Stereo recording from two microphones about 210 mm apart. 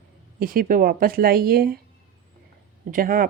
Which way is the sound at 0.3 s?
45° right (ahead or behind).